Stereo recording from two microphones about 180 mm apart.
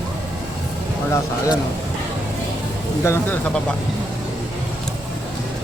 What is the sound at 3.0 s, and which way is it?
Speech, 15° left (ahead or behind).